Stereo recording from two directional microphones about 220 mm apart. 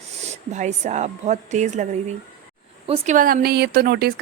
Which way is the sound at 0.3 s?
30° right (ahead or behind).